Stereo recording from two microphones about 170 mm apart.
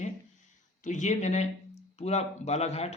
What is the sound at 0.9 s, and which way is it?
Speech, 45° left (ahead or behind).